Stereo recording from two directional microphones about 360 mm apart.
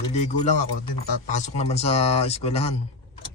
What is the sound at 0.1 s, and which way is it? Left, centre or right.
Speech, centre.